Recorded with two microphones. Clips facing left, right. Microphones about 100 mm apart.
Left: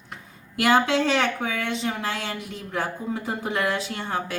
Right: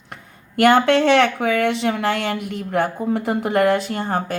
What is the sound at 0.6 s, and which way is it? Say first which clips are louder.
Speech: right 6 dB; 60° right (ahead or behind).